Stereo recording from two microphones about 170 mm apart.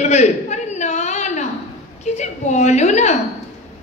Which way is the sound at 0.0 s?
40° left (ahead or behind).